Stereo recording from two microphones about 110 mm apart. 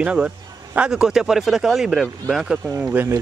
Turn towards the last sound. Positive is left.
turn(degrees=-15)  # may be behind; listen again after turning